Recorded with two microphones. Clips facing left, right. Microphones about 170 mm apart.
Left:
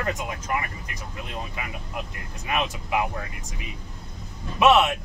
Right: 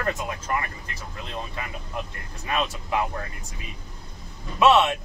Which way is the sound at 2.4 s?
15° left (ahead or behind).